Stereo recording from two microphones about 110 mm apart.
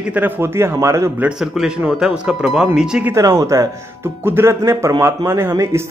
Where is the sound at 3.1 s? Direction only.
30° right (ahead or behind).